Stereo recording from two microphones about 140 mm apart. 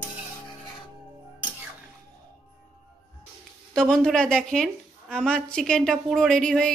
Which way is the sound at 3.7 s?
5° left (ahead or behind).